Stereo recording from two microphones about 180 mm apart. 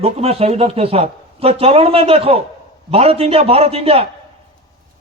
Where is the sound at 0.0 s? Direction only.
35° right (ahead or behind).